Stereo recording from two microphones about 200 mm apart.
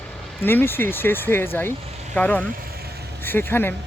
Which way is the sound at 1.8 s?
30° right (ahead or behind).